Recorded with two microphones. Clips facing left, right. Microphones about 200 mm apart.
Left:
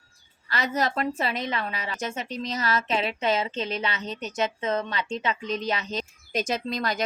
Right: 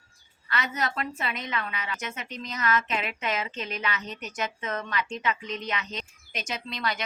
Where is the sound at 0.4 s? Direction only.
35° left (ahead or behind).